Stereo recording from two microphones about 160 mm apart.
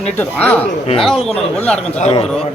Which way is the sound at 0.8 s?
35° left (ahead or behind).